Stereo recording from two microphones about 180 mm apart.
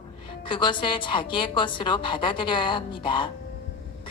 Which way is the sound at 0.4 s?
25° left (ahead or behind).